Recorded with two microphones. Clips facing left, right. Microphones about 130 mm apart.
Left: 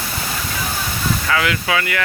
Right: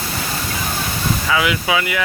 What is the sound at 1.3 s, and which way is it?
Speech, 15° right (ahead or behind).